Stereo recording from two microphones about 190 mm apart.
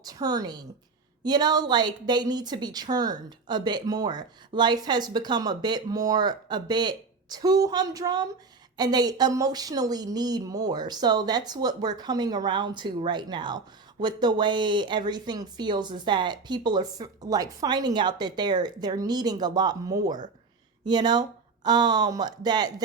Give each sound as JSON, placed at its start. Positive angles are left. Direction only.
{"t": 0.0, "sound": "a woman's voice", "side_deg": -20}